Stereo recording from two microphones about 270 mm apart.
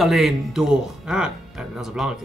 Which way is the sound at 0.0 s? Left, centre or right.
Centre.